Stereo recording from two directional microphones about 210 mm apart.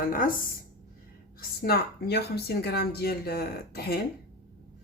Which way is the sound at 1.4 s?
45° left (ahead or behind).